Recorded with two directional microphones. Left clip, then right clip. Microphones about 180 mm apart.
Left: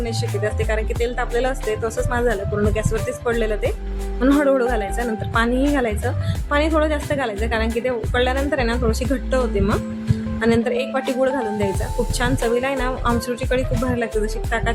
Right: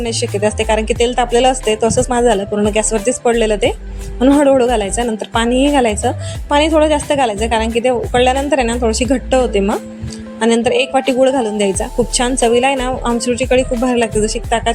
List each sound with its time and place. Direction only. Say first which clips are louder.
0.0 s a woman's voice: right 8 dB; 25° right (ahead or behind)